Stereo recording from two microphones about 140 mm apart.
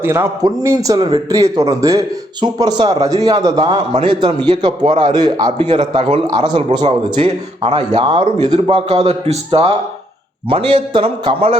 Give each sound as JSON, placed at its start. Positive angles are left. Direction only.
{"t": 0.0, "sound": "a man's voice", "side_deg": -15}
{"t": 0.9, "sound": "a man's voice", "side_deg": -35}
{"t": 1.4, "sound": "a man's voice", "side_deg": -25}
{"t": 6.8, "sound": "a man's voice", "side_deg": -45}
{"t": 7.9, "sound": "a man's voice", "side_deg": -35}
{"t": 8.5, "sound": "a man's voice", "side_deg": -45}